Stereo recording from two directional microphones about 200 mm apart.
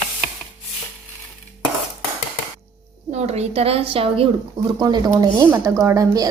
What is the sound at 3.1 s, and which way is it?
A woman's voice, 35° right (ahead or behind).